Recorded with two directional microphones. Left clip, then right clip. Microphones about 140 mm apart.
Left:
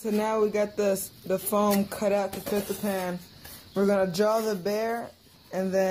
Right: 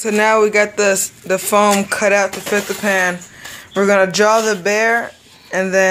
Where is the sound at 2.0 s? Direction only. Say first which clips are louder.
Right 12 dB; 10° left (ahead or behind).